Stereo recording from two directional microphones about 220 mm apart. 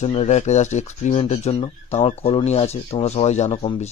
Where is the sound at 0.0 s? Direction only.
30° left (ahead or behind).